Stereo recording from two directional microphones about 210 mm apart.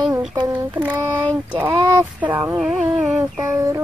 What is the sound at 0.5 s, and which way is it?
Speech, 10° right (ahead or behind).